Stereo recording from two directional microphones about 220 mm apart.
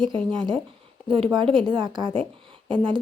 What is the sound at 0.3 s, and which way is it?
A woman's voice, 20° right (ahead or behind).